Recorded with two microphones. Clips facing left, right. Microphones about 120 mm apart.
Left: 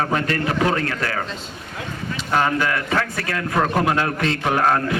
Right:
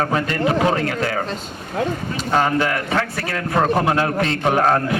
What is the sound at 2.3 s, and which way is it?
A man's voice, 25° right (ahead or behind).